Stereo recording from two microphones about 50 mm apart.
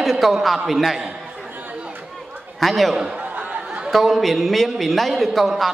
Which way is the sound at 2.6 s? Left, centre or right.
Centre.